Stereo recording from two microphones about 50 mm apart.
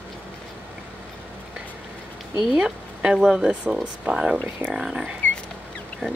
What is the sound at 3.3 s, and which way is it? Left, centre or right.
Speech, centre.